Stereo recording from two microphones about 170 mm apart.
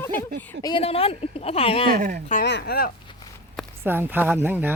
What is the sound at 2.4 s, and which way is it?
Speech, 80° left.